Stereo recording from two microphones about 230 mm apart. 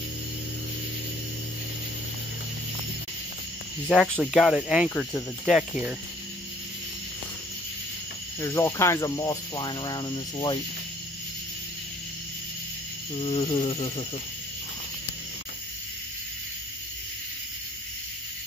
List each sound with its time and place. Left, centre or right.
3.8 s speech: centre
8.4 s speech: centre
13.1 s speech: left